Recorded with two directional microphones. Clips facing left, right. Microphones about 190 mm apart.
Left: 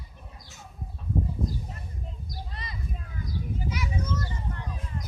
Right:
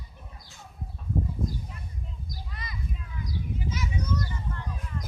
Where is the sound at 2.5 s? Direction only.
30° left (ahead or behind).